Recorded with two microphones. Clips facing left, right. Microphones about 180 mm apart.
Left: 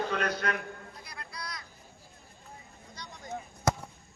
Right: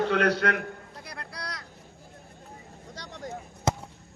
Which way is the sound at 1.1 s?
70° right (ahead or behind).